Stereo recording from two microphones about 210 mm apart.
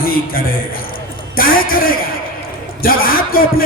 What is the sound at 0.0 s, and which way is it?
A man's voice, 45° left (ahead or behind).